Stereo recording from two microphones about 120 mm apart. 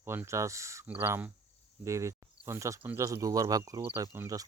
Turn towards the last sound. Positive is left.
turn(degrees=-30)  # may be behind; listen again after turning